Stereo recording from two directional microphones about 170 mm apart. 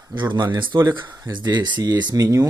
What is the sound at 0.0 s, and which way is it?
Speech, 25° right (ahead or behind).